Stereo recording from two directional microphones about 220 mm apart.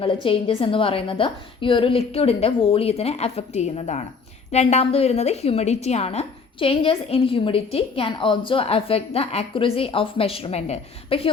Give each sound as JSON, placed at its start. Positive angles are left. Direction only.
{"t": 0.0, "sound": "a woman's voice", "side_deg": 25}